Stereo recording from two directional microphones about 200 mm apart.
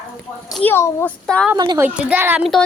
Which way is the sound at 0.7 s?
10° left (ahead or behind).